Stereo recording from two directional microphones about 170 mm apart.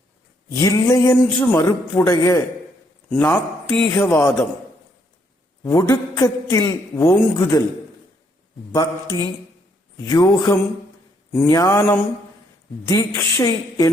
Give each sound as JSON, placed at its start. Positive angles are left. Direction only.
{"t": 0.6, "sound": "a man's voice", "side_deg": 20}
{"t": 3.1, "sound": "a man's voice", "side_deg": 10}
{"t": 5.6, "sound": "a man's voice", "side_deg": 20}
{"t": 8.7, "sound": "a man's voice", "side_deg": 20}
{"t": 12.9, "sound": "a man's voice", "side_deg": 20}